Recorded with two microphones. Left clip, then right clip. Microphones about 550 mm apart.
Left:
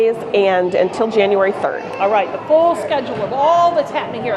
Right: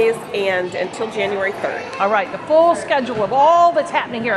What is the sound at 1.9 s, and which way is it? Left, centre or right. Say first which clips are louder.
Speech: left 2 dB; right.